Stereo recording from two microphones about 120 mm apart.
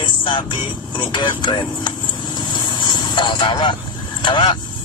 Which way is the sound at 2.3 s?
40° left (ahead or behind).